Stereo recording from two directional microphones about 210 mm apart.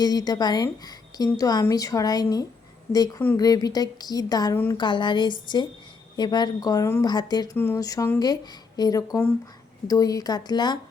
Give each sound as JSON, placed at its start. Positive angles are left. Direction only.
{"t": 0.0, "sound": "a woman's voice", "side_deg": 20}